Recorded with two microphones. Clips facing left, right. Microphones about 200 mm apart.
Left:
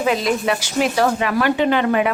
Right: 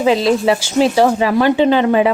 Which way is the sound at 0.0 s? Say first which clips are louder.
Right 6 dB; 30° right (ahead or behind).